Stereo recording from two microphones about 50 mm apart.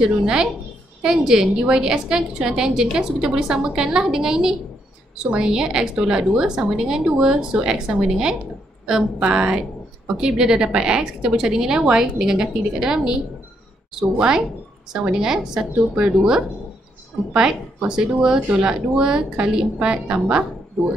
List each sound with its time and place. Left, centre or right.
0.0 s a woman's voice: centre